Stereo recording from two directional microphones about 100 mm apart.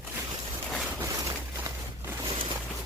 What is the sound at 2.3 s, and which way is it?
Boat, 55° right (ahead or behind).